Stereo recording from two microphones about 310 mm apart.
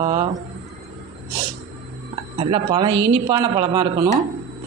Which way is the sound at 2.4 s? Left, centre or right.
Centre.